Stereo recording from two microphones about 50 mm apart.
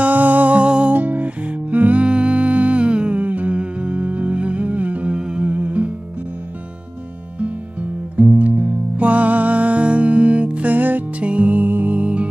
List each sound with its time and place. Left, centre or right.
0.0 s music: right
0.9 s music: right
7.3 s music: right